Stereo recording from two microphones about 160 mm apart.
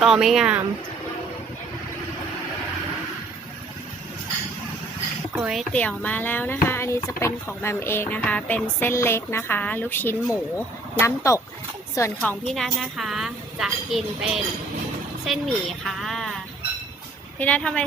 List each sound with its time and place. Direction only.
0.0 s a woman's voice: 5° right (ahead or behind)
5.3 s speech: 5° right (ahead or behind)
5.7 s speech: 10° left (ahead or behind)
12.5 s a woman's voice: centre (ahead or behind)
17.4 s speech: 5° left (ahead or behind)